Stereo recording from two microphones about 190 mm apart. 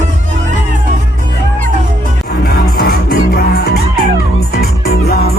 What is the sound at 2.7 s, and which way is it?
Music, 55° left (ahead or behind).